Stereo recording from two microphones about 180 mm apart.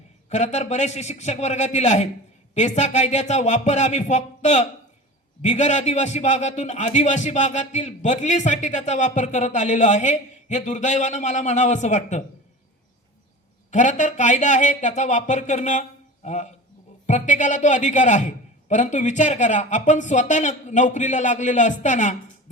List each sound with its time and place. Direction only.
0.3 s a man's voice: 40° left (ahead or behind)
13.7 s a man's voice: 45° left (ahead or behind)